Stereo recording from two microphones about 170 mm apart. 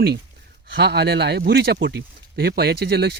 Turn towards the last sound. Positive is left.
turn(degrees=-70)  # may be behind; listen again after turning